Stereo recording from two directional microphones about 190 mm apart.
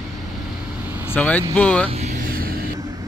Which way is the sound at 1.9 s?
35° right (ahead or behind).